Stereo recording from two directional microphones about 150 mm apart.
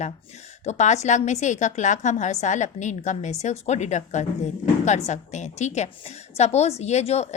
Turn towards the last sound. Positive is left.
turn(degrees=45)  # may be behind; listen again after turning